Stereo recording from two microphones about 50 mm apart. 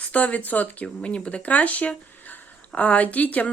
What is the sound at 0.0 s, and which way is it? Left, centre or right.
Speech, left.